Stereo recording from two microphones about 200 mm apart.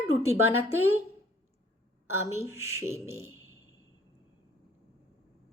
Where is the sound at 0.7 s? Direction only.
90° right.